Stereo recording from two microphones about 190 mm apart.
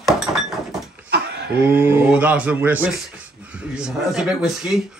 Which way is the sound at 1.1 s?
60° right (ahead or behind).